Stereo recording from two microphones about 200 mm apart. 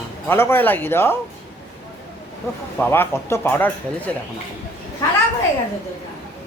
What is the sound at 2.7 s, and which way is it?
A man's voice, 10° left (ahead or behind).